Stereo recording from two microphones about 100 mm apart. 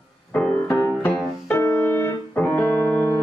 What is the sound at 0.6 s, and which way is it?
Piano, 25° left (ahead or behind).